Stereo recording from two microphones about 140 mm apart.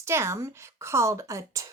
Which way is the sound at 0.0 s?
20° right (ahead or behind).